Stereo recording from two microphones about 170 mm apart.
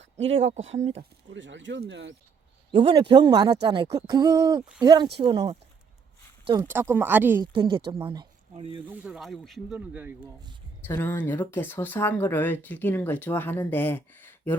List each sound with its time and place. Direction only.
0.2 s speech: 35° right (ahead or behind)
1.3 s speech: 90° right
2.7 s speech: 35° right (ahead or behind)
6.7 s speech: 15° right (ahead or behind)
7.4 s speech: 30° right (ahead or behind)
8.9 s speech: 5° right (ahead or behind)
10.8 s speech: 10° left (ahead or behind)